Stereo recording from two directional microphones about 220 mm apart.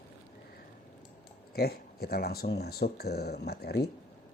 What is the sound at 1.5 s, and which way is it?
Speech, 45° left (ahead or behind).